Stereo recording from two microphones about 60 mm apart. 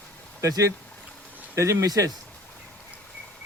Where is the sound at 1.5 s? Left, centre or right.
Right.